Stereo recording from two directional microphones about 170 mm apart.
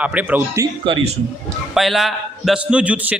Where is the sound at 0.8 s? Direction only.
30° right (ahead or behind).